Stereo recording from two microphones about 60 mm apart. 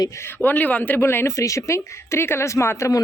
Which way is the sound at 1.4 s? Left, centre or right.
Left.